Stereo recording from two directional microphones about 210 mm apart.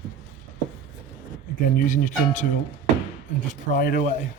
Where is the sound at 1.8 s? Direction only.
40° left (ahead or behind).